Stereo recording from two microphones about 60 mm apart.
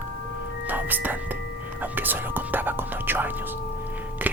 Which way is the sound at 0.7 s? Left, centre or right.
Right.